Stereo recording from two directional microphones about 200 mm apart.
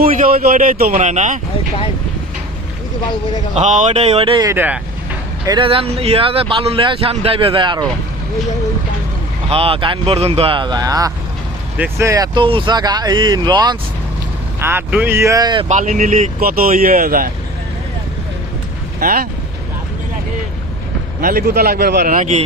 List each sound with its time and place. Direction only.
0.0 s speech: 45° right (ahead or behind)
3.5 s speech: 35° right (ahead or behind)
4.5 s speech: 10° right (ahead or behind)
5.5 s speech: 25° right (ahead or behind)
9.5 s speech: 30° right (ahead or behind)
14.6 s speech: 10° right (ahead or behind)
15.7 s speech: 40° right (ahead or behind)
18.9 s speech: 45° right (ahead or behind)
21.2 s speech: 45° right (ahead or behind)